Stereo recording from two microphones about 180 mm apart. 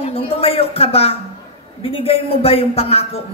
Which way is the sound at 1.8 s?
30° left (ahead or behind).